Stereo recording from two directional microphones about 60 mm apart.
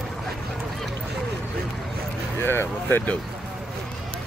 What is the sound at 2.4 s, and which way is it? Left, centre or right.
Speech, left.